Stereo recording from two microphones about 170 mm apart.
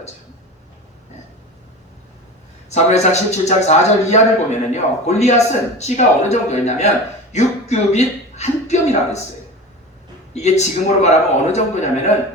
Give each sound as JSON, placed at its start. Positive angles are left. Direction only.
{"t": 2.6, "sound": "a man's voice", "side_deg": 40}
{"t": 7.3, "sound": "a sound", "side_deg": 40}
{"t": 10.3, "sound": "a man's voice", "side_deg": 40}